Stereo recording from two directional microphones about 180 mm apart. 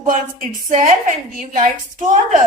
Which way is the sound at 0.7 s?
45° right (ahead or behind).